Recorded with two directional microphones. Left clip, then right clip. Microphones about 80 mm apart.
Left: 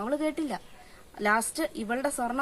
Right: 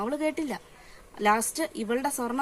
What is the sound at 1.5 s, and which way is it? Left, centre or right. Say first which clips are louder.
Speech: right 1 dB; left.